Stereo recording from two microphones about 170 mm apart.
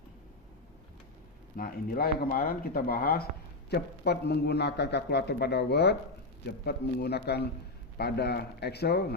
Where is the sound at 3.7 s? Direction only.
75° left (ahead or behind).